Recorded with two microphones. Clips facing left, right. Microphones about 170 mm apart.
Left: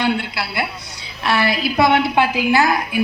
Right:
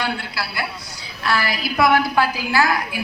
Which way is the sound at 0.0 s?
20° left (ahead or behind).